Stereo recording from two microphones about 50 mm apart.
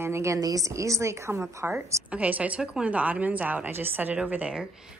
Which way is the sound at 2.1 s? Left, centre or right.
Right.